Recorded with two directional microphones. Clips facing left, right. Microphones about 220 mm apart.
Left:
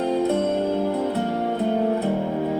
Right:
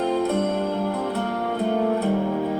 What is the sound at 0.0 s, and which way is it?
Music, 25° left (ahead or behind).